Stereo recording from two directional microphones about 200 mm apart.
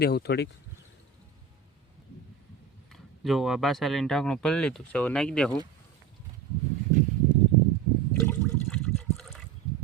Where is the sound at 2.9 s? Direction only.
Centre (ahead or behind).